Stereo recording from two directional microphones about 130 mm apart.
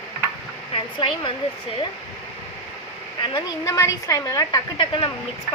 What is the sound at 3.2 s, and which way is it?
A woman's voice, 30° left (ahead or behind).